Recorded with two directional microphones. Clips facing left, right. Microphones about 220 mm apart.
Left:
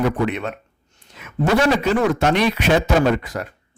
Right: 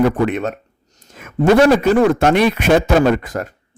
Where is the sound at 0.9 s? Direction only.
45° right (ahead or behind).